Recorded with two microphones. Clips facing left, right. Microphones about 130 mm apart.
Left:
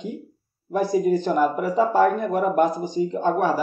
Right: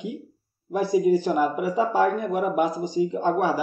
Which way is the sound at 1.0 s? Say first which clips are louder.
Even; 10° right (ahead or behind).